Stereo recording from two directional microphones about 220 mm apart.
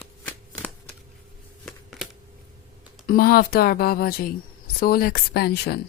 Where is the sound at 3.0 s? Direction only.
40° left (ahead or behind).